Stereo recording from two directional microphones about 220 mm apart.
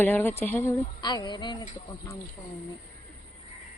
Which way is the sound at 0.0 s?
10° left (ahead or behind).